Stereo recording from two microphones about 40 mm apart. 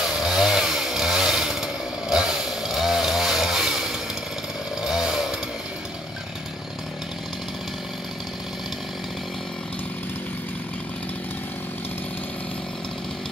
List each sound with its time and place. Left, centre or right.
0.0 s chainsaw: centre
2.7 s chainsaw: centre